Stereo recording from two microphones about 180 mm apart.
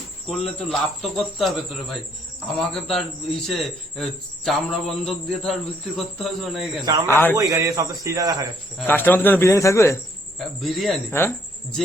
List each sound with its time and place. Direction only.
0.3 s a man's voice: centre (ahead or behind)
7.1 s a man's voice: 10° left (ahead or behind)
7.3 s a man's voice: 20° right (ahead or behind)
8.9 s a man's voice: 10° left (ahead or behind)
10.3 s a man's voice: centre (ahead or behind)